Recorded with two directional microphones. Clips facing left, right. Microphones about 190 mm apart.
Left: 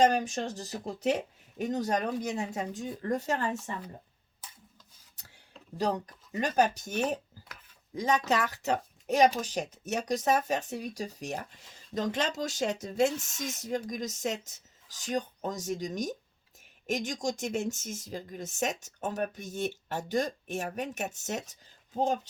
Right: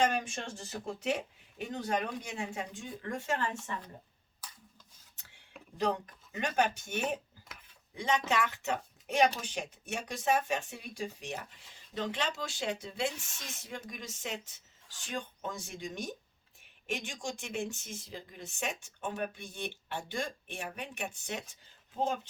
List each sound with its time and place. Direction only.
0.0 s speech: 40° left (ahead or behind)
5.7 s speech: 35° left (ahead or behind)